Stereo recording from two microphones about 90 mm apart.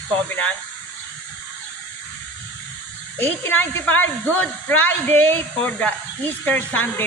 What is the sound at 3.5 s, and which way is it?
A woman's voice, 20° left (ahead or behind).